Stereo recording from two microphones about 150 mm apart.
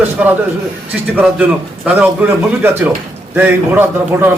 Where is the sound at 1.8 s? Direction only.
10° right (ahead or behind).